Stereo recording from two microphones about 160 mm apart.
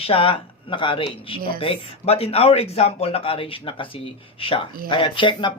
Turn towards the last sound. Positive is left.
turn(degrees=30)  # may be behind; listen again after turning